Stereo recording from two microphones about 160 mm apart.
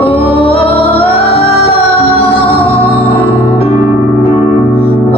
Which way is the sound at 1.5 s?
75° left (ahead or behind).